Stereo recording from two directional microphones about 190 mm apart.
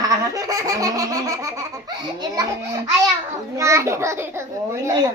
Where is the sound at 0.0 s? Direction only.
20° right (ahead or behind).